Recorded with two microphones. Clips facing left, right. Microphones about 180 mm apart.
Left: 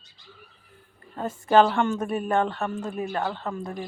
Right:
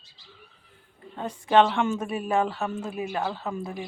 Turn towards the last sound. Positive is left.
turn(degrees=-5)  # may be behind; listen again after turning